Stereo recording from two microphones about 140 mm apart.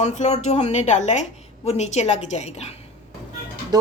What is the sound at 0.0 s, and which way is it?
A woman's voice, 55° left (ahead or behind).